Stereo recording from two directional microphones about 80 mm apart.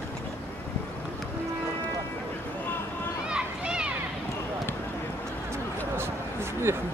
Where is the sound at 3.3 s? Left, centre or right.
Centre.